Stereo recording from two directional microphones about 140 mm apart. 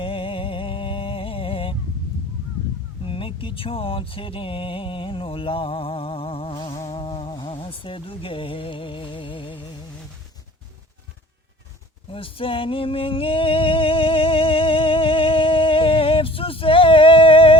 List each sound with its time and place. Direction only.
0.0 s music: 40° left (ahead or behind)
3.0 s a sound: 40° left (ahead or behind)
7.3 s music: 35° left (ahead or behind)
12.1 s music: 40° left (ahead or behind)